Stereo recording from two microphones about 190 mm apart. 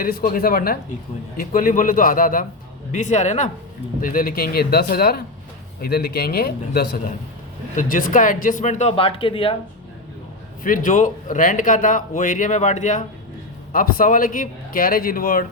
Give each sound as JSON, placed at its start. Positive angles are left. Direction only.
{"t": 0.0, "sound": "a man's voice", "side_deg": 50}
{"t": 10.6, "sound": "a man's voice", "side_deg": 45}